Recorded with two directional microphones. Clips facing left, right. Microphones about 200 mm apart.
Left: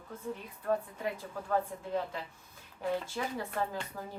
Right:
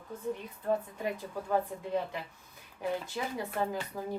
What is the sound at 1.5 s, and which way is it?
Speech, 15° right (ahead or behind).